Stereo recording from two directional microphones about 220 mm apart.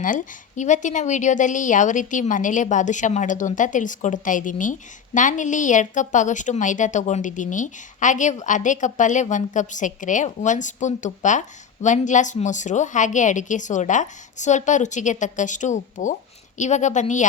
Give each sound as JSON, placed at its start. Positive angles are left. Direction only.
{"t": 0.0, "sound": "a woman's voice", "side_deg": 35}